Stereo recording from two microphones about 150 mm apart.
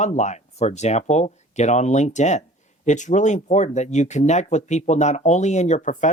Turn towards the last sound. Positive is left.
turn(degrees=55)  # may be behind; listen again after turning